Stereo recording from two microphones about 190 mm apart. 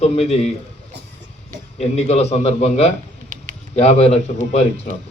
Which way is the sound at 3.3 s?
45° right (ahead or behind).